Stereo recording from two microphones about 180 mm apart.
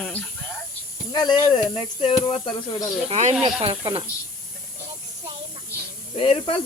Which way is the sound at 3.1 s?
40° right (ahead or behind).